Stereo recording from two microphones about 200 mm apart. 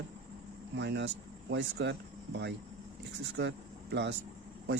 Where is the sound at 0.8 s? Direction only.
60° right (ahead or behind).